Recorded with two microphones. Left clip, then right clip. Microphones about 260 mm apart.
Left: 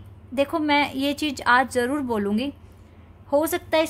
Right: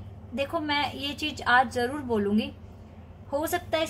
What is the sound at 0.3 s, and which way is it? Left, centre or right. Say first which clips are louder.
A woman's voice: left 7 dB; left.